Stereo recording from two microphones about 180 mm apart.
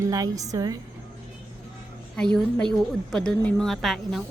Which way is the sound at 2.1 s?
5° left (ahead or behind).